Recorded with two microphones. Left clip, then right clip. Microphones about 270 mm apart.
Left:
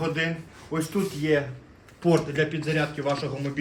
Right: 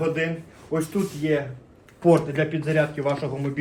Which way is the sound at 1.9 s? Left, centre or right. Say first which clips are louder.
Right 4 dB; centre.